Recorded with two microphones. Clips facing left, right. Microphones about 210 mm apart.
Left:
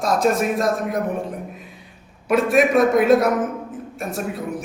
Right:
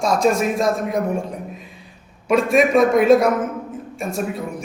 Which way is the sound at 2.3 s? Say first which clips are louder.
Right 1 dB; centre (ahead or behind).